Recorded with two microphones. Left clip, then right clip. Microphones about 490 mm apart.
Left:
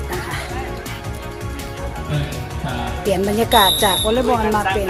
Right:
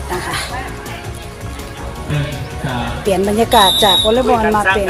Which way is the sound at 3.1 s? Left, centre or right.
Left.